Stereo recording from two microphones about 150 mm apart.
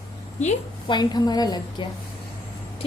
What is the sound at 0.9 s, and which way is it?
Speech, 30° left (ahead or behind).